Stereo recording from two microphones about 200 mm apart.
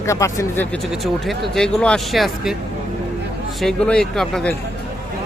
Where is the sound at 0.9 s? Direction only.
Centre (ahead or behind).